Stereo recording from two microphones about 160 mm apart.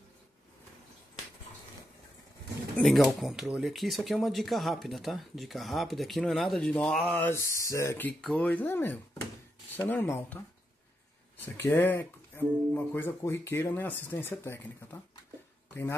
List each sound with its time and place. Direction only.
2.8 s speech: centre (ahead or behind); by 8.1 s 15° left (ahead or behind)
8.2 s speech: 5° left (ahead or behind)
11.4 s speech: 15° left (ahead or behind)